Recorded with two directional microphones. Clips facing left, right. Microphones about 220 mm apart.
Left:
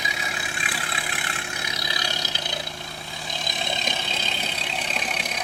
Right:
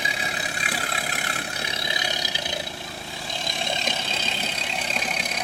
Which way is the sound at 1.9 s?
20° right (ahead or behind).